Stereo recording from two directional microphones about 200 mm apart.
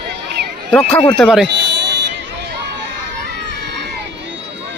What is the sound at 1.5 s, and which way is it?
Buzzer, 55° right (ahead or behind).